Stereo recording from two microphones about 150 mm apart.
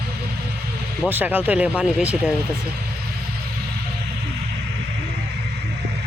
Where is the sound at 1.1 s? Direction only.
10° right (ahead or behind).